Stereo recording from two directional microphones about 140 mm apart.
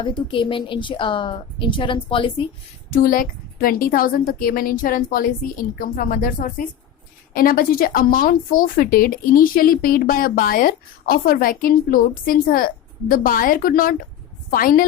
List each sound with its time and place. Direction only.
0.0 s speech: 35° left (ahead or behind)
2.9 s speech: 85° left